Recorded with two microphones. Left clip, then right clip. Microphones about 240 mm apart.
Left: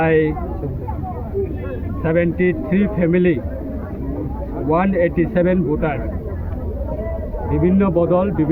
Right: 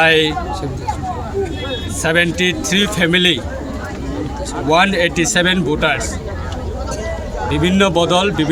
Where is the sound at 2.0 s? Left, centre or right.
Right.